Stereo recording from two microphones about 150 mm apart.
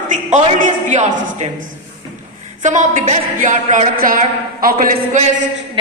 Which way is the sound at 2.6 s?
55° right (ahead or behind).